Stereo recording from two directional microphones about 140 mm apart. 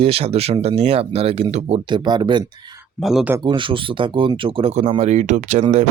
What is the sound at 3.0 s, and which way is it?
Speech, centre (ahead or behind).